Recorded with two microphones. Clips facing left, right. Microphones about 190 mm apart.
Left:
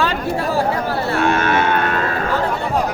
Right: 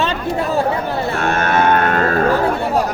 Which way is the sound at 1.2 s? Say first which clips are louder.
Right 1 dB; 50° right (ahead or behind).